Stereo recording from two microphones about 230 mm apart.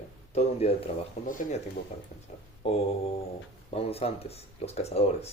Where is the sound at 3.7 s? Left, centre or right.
Left.